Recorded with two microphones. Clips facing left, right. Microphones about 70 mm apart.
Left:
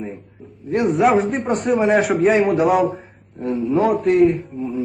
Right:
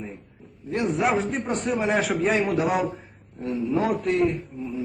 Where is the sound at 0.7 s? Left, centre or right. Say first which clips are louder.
Left 7 dB; left.